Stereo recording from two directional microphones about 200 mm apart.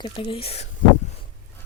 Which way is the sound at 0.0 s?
25° left (ahead or behind).